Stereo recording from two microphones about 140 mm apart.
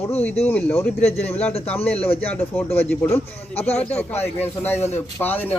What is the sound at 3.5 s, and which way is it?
Speech, 45° left (ahead or behind).